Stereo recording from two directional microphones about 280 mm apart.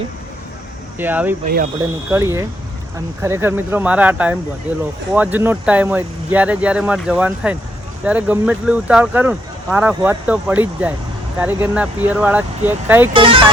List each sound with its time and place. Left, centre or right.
0.9 s speech: centre
13.1 s speech: centre